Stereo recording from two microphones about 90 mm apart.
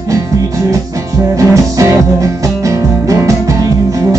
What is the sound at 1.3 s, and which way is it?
Music, 35° right (ahead or behind).